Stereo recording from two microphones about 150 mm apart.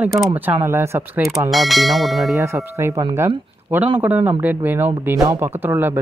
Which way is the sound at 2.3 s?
15° right (ahead or behind).